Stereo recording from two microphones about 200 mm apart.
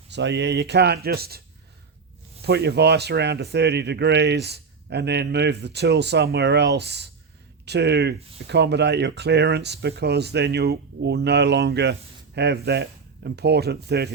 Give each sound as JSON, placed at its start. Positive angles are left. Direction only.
{"t": 0.1, "sound": "speech", "side_deg": -60}
{"t": 2.4, "sound": "speech", "side_deg": -55}